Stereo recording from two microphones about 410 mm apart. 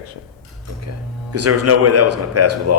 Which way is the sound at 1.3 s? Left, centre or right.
Right.